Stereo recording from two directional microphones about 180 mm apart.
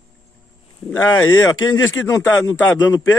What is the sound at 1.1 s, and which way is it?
A man's voice, 20° left (ahead or behind).